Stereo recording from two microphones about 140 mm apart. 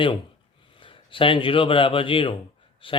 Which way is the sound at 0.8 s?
35° left (ahead or behind).